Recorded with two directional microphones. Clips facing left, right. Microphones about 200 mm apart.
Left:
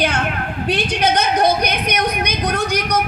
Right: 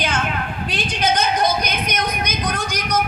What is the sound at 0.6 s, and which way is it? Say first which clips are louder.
A woman's voice: left 4 dB; 60° left (ahead or behind).